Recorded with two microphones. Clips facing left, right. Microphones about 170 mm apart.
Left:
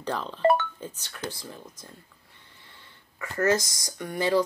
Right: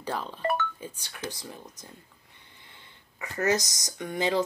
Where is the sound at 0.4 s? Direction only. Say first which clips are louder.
Left 8 dB; 30° left (ahead or behind).